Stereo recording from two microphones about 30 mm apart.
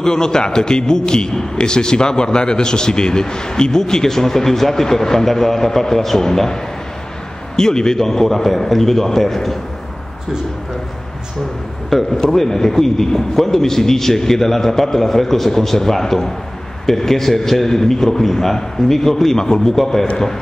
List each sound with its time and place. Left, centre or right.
0.0 s a man's voice: left
11.9 s a man's voice: centre
19.7 s a man's voice: centre